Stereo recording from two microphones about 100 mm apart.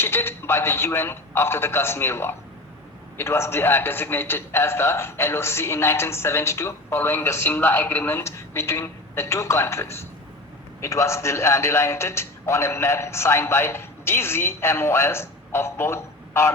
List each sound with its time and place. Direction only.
0.0 s a man's voice: 20° left (ahead or behind)